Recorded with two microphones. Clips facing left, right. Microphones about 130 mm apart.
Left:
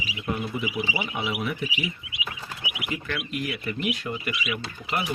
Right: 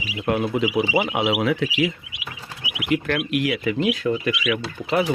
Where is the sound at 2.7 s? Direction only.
75° right (ahead or behind).